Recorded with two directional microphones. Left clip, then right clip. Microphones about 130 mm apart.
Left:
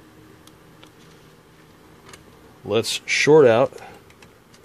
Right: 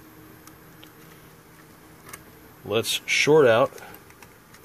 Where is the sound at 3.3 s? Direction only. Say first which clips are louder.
Left 4 dB; 50° left (ahead or behind).